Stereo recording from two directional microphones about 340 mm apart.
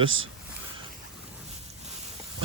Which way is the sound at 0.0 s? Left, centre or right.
Right.